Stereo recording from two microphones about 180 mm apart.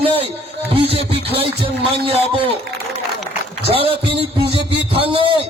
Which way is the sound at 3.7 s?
30° right (ahead or behind).